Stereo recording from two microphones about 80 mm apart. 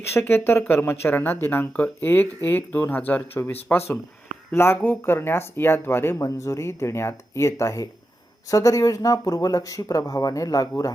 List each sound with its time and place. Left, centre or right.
0.1 s speech: left